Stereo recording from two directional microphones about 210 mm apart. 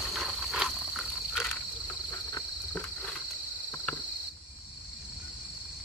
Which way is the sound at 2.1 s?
15° left (ahead or behind).